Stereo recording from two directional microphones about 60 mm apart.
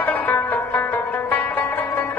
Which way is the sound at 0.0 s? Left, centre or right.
Left.